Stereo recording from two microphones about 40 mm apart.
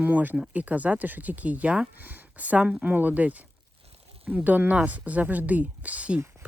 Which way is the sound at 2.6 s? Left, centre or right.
Right.